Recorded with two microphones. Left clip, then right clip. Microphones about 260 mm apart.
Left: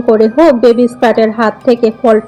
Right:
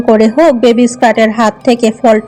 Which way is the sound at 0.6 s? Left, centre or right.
Right.